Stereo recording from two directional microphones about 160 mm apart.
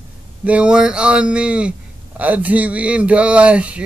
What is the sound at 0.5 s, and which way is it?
A man's voice, 5° right (ahead or behind).